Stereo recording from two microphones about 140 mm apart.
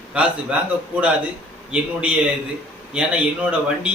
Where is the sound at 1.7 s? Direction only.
10° right (ahead or behind).